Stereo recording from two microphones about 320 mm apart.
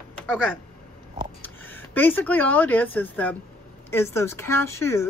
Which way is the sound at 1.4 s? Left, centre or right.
Centre.